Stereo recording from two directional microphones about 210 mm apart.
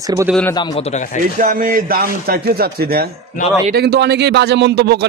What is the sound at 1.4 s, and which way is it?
A man's voice, 40° right (ahead or behind).